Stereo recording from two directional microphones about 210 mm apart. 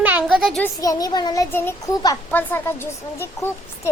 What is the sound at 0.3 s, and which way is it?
Speech, centre (ahead or behind).